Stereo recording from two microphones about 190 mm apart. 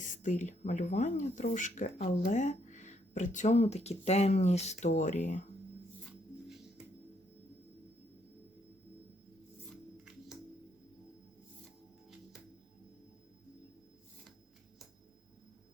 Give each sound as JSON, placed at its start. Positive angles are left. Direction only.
{"t": 0.0, "sound": "speech", "side_deg": 40}